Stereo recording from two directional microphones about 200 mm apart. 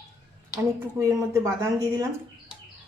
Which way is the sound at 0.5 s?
15° right (ahead or behind).